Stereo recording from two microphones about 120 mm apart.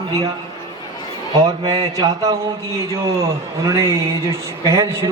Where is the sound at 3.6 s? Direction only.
25° right (ahead or behind).